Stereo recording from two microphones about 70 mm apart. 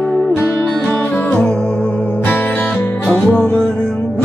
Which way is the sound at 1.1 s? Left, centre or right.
Left.